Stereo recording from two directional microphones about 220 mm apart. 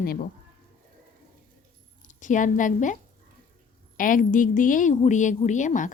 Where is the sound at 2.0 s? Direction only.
35° left (ahead or behind).